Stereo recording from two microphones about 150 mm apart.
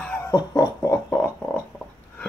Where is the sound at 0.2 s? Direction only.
25° left (ahead or behind).